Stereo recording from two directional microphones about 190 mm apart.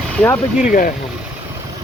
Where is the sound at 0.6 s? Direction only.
45° left (ahead or behind).